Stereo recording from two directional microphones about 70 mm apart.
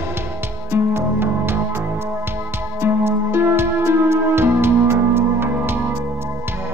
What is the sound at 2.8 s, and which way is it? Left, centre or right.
Music, right.